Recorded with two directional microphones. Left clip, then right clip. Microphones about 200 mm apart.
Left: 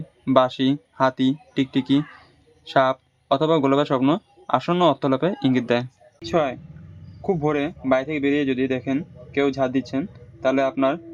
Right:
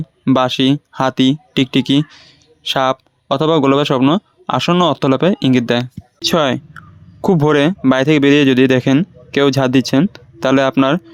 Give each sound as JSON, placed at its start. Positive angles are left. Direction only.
{"t": 0.3, "sound": "speech", "side_deg": -35}
{"t": 6.2, "sound": "speech", "side_deg": -50}